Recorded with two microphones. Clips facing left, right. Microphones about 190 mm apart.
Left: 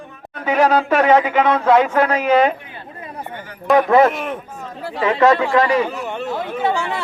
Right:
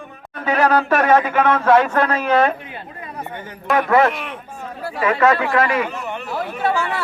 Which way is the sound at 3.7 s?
25° left (ahead or behind).